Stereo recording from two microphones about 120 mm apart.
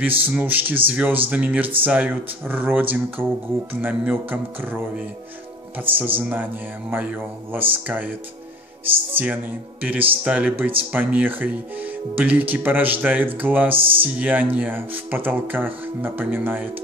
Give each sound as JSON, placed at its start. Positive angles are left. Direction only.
{"t": 0.3, "sound": "speech", "side_deg": -15}